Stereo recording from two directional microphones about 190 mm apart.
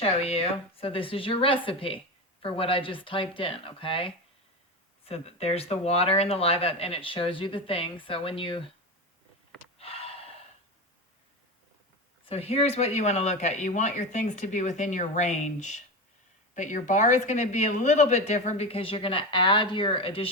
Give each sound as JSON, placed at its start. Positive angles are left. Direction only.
{"t": 0.0, "sound": "speech", "side_deg": 30}
{"t": 9.7, "sound": "gasp", "side_deg": 30}
{"t": 12.2, "sound": "speech", "side_deg": 30}